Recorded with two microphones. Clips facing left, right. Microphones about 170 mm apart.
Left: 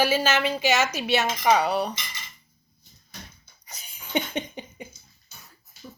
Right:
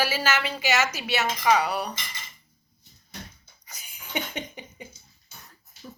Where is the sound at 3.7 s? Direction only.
20° left (ahead or behind).